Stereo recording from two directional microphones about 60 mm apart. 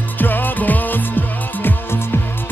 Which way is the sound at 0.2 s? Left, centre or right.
Left.